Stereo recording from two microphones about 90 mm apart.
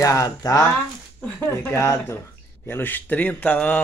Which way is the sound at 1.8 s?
30° left (ahead or behind).